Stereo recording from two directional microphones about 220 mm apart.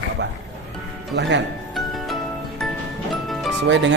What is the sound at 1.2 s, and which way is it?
Speech, 50° right (ahead or behind).